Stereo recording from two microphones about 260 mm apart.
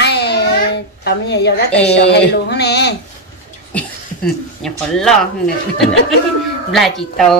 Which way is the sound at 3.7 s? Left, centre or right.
Centre.